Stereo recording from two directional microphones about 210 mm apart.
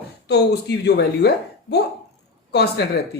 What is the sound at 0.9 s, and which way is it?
Speech, 50° left (ahead or behind).